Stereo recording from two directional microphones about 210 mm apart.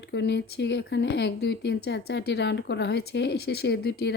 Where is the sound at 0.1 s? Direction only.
55° left (ahead or behind).